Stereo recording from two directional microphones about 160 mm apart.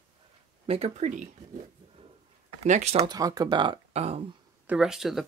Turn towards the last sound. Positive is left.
turn(degrees=0)  # may be behind; listen again after turning